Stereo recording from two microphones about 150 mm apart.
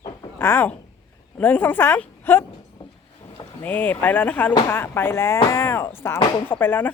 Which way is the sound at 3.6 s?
10° left (ahead or behind).